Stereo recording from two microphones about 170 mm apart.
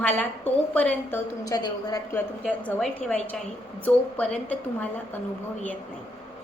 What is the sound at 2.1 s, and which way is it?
A woman's voice, 10° left (ahead or behind).